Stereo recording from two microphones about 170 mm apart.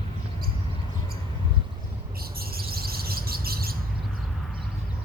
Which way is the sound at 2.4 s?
65° right (ahead or behind).